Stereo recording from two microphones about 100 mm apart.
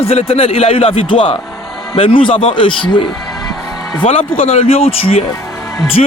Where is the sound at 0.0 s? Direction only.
85° left; by 3.0 s 55° left (ahead or behind).